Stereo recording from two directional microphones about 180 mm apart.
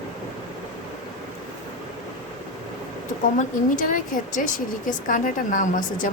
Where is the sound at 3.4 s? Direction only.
45° left (ahead or behind).